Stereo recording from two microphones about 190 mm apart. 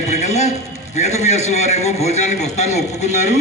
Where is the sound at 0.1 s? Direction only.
35° left (ahead or behind).